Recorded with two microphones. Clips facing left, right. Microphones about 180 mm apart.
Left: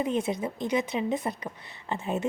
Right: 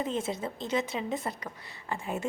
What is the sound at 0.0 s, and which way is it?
A woman's voice, 15° left (ahead or behind).